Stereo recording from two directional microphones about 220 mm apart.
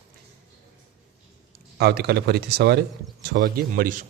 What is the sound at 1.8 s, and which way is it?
A man's voice, 45° right (ahead or behind).